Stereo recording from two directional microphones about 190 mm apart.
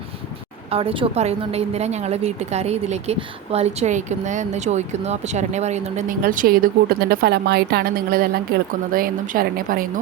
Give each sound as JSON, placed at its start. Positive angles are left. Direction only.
{"t": 0.7, "sound": "a woman's voice", "side_deg": -30}